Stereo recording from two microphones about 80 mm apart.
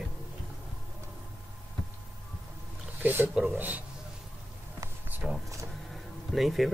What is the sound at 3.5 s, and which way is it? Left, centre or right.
Speech, right.